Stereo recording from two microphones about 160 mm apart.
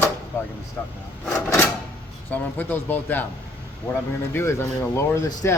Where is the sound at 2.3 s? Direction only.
10° left (ahead or behind).